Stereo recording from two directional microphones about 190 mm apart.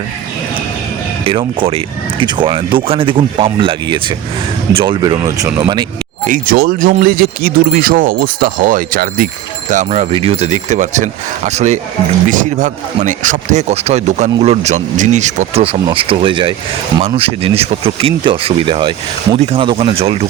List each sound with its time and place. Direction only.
1.2 s speech: 30° right (ahead or behind)
6.2 s speech: 45° right (ahead or behind); by 20.2 s 30° right (ahead or behind)